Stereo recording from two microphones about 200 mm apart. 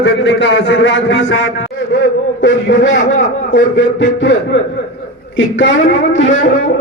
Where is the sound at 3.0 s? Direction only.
40° left (ahead or behind).